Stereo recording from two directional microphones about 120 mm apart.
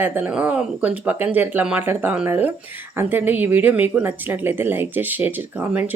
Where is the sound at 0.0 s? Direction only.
15° right (ahead or behind).